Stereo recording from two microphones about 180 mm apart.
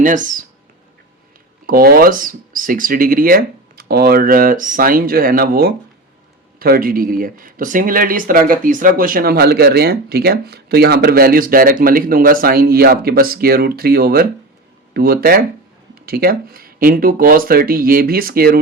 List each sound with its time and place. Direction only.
0.0 s speech: 45° right (ahead or behind)
1.6 s speech: 55° right (ahead or behind)